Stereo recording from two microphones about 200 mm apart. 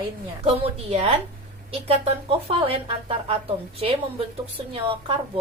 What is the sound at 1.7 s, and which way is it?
Speech, 30° right (ahead or behind).